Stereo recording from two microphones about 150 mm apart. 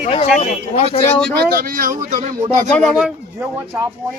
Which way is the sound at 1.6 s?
70° right (ahead or behind).